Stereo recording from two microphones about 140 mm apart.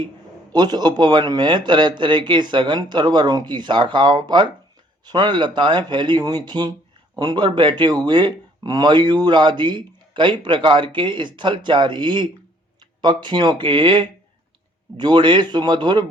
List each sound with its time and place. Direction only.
0.5 s speech: 30° right (ahead or behind)